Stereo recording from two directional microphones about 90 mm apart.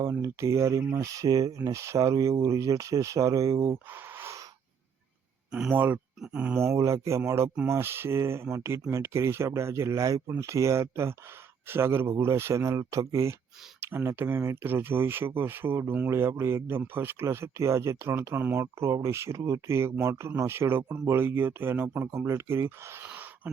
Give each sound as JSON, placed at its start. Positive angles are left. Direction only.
{"t": 0.0, "sound": "speech", "side_deg": -35}
{"t": 5.5, "sound": "speech", "side_deg": -10}
{"t": 6.6, "sound": "speech", "side_deg": -30}
{"t": 23.0, "sound": "a sound", "side_deg": -15}